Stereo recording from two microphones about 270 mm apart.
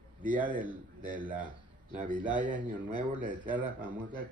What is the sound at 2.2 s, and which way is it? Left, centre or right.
Speech, centre.